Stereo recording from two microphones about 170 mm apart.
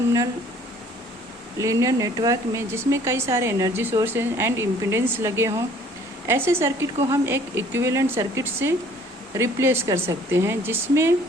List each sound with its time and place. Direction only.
1.5 s speech: 20° right (ahead or behind)